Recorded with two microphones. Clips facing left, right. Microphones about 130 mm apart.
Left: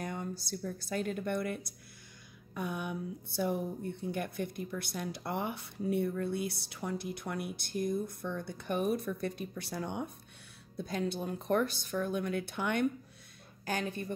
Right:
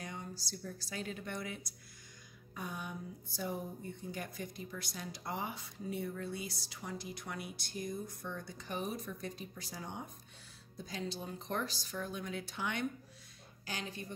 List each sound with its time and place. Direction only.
0.0 s speech: 55° left (ahead or behind)